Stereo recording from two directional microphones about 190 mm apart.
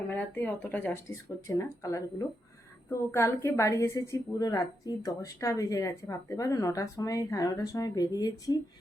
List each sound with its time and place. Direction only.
0.1 s a woman's voice: 10° left (ahead or behind)